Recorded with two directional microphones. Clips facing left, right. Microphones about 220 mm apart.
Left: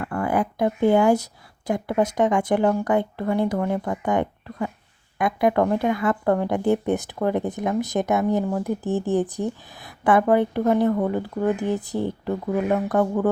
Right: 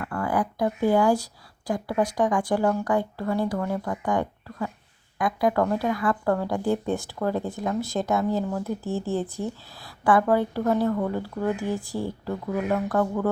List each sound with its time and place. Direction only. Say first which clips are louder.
0.0 s speech: left 3 dB; 20° left (ahead or behind)